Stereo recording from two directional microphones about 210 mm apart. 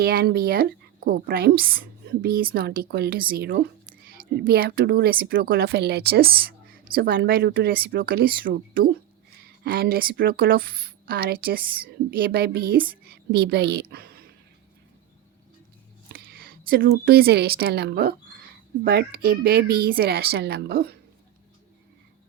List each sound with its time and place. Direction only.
0.0 s a woman's voice: 45° right (ahead or behind)
13.9 s a sound: 45° right (ahead or behind)
16.1 s speech: 45° right (ahead or behind)